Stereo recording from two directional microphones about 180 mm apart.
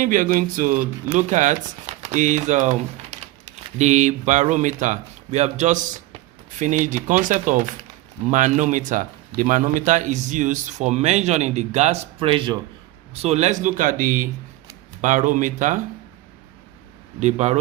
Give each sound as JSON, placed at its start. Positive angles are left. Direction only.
{"t": 0.0, "sound": "speech", "side_deg": -50}
{"t": 17.2, "sound": "speech", "side_deg": -40}